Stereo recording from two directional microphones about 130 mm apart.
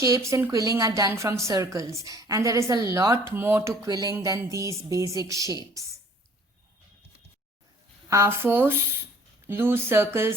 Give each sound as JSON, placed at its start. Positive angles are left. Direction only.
{"t": 0.0, "sound": "a woman's voice", "side_deg": -25}
{"t": 8.1, "sound": "a woman's voice", "side_deg": -20}